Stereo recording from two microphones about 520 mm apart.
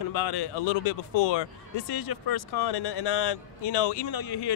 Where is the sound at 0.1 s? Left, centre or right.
Left.